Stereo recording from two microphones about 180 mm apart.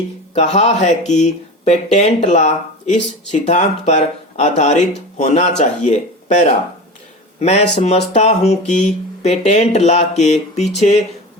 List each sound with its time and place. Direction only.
0.3 s speech: 40° left (ahead or behind)